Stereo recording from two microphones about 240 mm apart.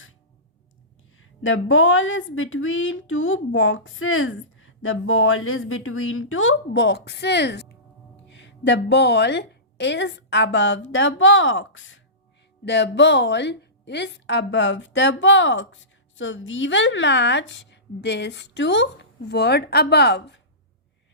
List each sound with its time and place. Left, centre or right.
1.2 s a woman's voice: left